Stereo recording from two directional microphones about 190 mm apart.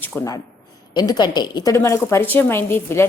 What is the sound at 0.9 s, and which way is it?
Speech, 20° left (ahead or behind).